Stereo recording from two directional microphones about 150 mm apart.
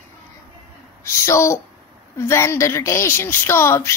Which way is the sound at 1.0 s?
20° left (ahead or behind).